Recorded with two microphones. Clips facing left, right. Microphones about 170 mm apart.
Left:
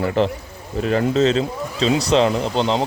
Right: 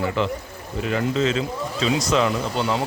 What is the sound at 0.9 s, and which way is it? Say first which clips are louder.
Speech: left 5 dB; 40° left (ahead or behind).